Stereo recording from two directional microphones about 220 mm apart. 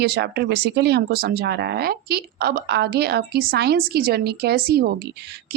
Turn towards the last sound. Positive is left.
turn(degrees=-45)  # may be behind; listen again after turning